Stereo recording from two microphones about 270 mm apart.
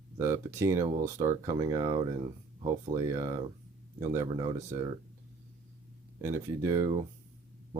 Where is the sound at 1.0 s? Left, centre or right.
Right.